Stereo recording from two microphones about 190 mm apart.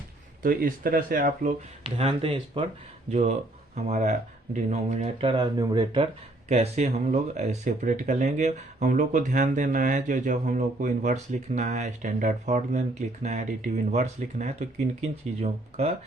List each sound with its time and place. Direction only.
0.4 s speech: 50° right (ahead or behind)
1.8 s speech: 30° right (ahead or behind)
5.3 s speech: 20° right (ahead or behind)
6.5 s speech: 35° right (ahead or behind)